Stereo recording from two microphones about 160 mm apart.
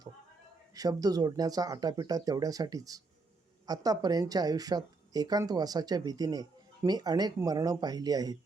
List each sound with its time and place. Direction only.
0.7 s speech: 25° right (ahead or behind)